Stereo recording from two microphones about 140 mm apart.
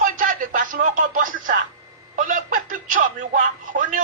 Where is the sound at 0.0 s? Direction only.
70° right (ahead or behind).